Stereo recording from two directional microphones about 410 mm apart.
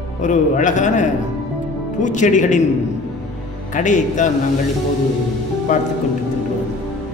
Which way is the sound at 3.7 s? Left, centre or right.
Centre.